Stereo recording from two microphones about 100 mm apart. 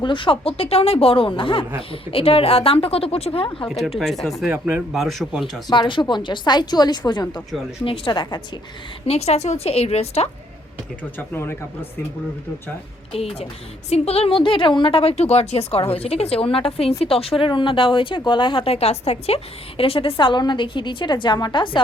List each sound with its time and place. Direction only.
0.0 s a woman's voice: 55° left (ahead or behind)
3.7 s speech: centre (ahead or behind)
4.5 s speech: 15° right (ahead or behind)
4.9 s speech: centre (ahead or behind)
5.7 s a woman's voice: 50° left (ahead or behind)
9.0 s a woman's voice: 90° left
11.2 s speech: 20° left (ahead or behind)
13.1 s speech: 80° left
13.9 s a woman's voice: 90° left; by 21.8 s 55° left (ahead or behind)